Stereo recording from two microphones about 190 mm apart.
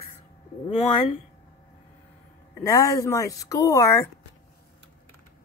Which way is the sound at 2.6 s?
15° left (ahead or behind).